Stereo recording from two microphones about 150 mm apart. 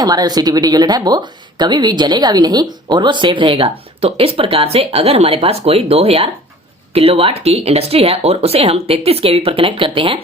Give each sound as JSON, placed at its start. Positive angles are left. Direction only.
{"t": 0.0, "sound": "speech", "side_deg": -25}